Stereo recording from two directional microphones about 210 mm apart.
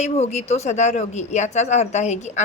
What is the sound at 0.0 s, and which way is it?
A woman's voice, 30° left (ahead or behind).